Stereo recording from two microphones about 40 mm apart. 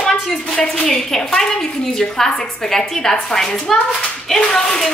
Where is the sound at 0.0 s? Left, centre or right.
Centre.